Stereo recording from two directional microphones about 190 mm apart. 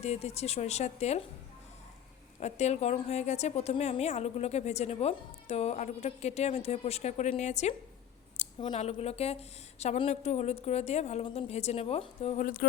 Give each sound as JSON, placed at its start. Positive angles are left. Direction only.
{"t": 0.0, "sound": "a woman's voice", "side_deg": 35}
{"t": 2.4, "sound": "a woman's voice", "side_deg": 35}